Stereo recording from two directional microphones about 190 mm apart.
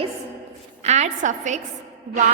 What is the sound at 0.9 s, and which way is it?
Speech, 40° right (ahead or behind).